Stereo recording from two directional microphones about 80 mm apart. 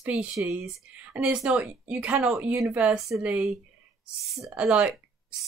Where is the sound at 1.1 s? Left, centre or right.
Centre.